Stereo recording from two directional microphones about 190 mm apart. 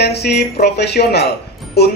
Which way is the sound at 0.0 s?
60° left (ahead or behind).